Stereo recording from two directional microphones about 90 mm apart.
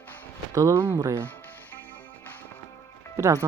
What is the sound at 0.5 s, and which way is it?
Speech, 30° right (ahead or behind).